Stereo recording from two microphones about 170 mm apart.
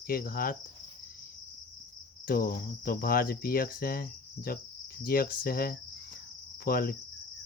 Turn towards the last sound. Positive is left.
turn(degrees=60)  # may be behind; listen again after turning